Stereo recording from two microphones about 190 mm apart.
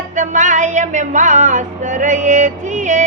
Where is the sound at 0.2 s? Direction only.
40° right (ahead or behind).